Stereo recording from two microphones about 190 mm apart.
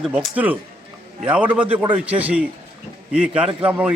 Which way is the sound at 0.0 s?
5° right (ahead or behind).